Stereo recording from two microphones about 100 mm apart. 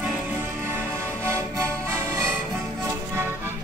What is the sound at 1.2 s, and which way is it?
Music, 30° right (ahead or behind).